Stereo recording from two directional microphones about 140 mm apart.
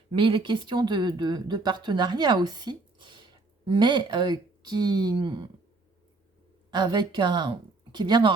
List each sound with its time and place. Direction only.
0.1 s speech: 35° right (ahead or behind)
6.7 s speech: 30° right (ahead or behind)